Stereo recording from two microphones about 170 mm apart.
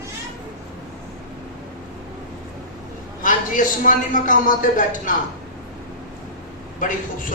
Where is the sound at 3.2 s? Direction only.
50° left (ahead or behind).